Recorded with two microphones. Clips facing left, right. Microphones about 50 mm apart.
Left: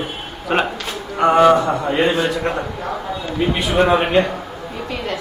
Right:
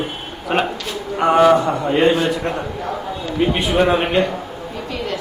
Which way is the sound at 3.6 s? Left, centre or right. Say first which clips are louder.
Left 2 dB; centre.